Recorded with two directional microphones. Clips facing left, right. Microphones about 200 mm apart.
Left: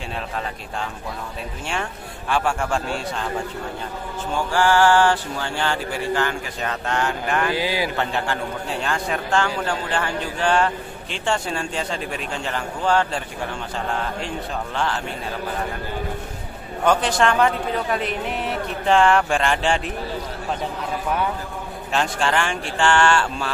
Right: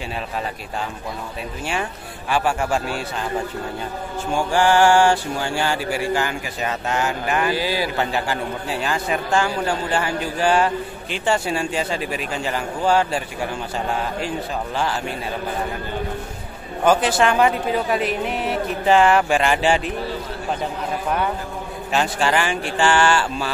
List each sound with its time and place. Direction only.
1.7 s a man's voice: 5° right (ahead or behind)
4.3 s a man's voice: 15° right (ahead or behind)
7.5 s speech: 15° left (ahead or behind)
8.0 s a man's voice: 5° right (ahead or behind)
16.8 s a man's voice: 5° right (ahead or behind)
21.9 s a man's voice: 5° right (ahead or behind)